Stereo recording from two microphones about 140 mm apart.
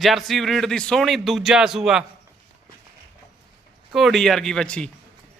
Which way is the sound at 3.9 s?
Centre (ahead or behind).